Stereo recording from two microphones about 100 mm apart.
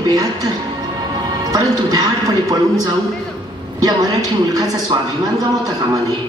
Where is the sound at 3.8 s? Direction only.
40° right (ahead or behind).